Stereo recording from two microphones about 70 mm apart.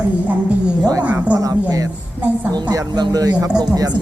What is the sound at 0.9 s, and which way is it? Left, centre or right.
Speech, right.